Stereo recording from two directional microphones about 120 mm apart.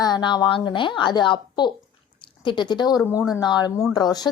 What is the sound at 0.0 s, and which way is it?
Speech, 35° left (ahead or behind).